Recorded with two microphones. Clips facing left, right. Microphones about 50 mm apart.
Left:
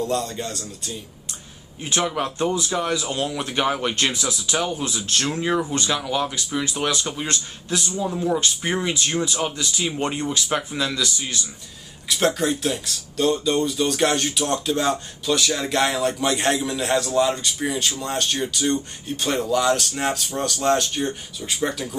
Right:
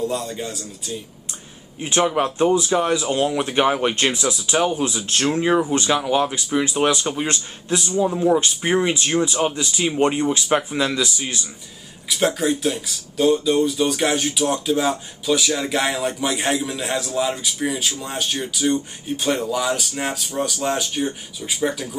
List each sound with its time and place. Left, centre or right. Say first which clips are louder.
0.0 s speech: even; centre
1.8 s speech: right 4 dB; centre
12.1 s speech: right 1 dB; centre